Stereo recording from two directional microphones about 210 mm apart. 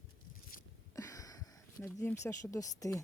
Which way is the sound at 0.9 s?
15° left (ahead or behind).